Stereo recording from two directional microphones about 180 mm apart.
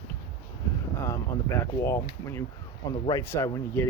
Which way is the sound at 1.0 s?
15° left (ahead or behind).